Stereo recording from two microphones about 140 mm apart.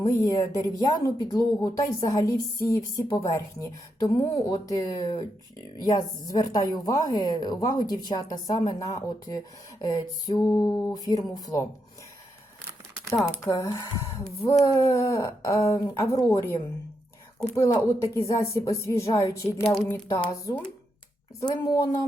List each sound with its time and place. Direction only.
0.0 s speech: 25° left (ahead or behind)
13.4 s speech: 20° left (ahead or behind)